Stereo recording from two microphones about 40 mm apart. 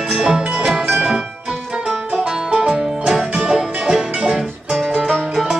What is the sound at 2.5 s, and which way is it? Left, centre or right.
Music, centre.